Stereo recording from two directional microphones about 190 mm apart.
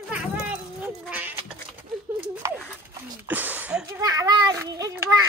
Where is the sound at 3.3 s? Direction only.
10° right (ahead or behind).